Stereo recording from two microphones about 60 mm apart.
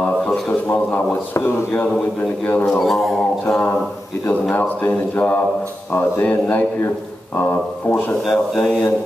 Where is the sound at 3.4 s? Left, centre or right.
Centre.